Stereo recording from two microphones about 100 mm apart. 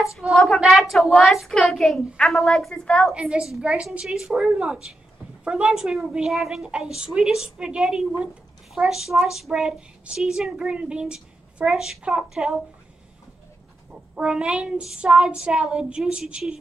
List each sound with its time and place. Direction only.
0.3 s speech: centre (ahead or behind)
3.2 s child singing: 10° right (ahead or behind)
5.4 s speech: 10° right (ahead or behind)
14.1 s child singing: 10° right (ahead or behind)